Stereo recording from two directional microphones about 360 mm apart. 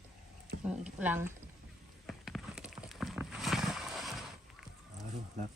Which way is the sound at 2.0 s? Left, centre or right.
Centre.